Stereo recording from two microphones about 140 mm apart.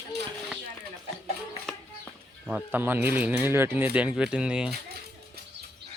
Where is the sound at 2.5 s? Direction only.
10° right (ahead or behind).